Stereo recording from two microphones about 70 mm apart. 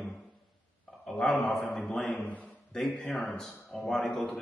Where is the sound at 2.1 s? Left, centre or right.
Left.